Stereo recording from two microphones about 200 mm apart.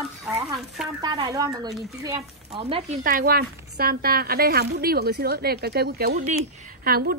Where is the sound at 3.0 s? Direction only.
45° right (ahead or behind).